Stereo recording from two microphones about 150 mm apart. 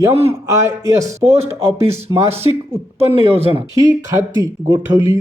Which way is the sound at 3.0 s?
40° right (ahead or behind).